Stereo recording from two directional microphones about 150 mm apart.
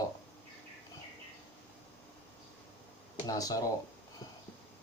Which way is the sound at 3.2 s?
25° left (ahead or behind).